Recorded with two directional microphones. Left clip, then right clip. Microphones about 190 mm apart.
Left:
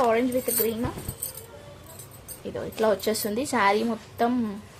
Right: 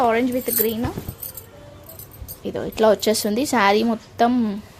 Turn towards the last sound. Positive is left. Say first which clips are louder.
# right 6 dB
turn(degrees=-45)  # may be behind; listen again after turning